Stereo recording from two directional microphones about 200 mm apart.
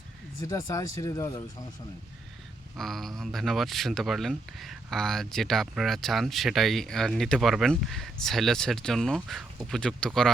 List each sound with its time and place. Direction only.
0.4 s speech: 15° left (ahead or behind)
2.7 s speech: centre (ahead or behind)